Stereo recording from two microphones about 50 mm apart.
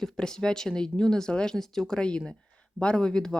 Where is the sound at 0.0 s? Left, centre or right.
Centre.